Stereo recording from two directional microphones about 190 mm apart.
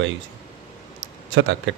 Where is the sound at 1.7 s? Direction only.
75° right (ahead or behind).